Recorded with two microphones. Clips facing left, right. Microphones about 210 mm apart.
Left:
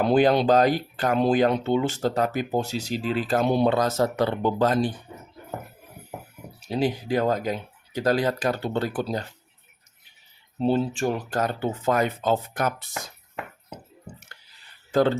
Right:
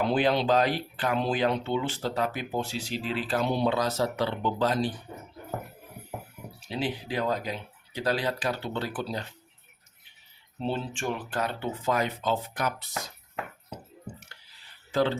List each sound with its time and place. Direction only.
0.0 s speech: 45° left (ahead or behind)
6.7 s speech: 40° left (ahead or behind)
10.6 s speech: 40° left (ahead or behind)
14.9 s speech: 50° left (ahead or behind)